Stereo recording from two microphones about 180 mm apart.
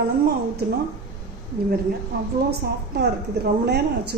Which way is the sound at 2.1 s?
55° right (ahead or behind).